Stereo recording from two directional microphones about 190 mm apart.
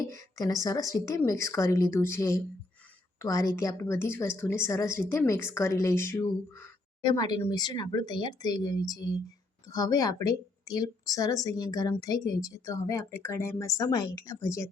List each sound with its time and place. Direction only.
0.3 s speech: 20° left (ahead or behind)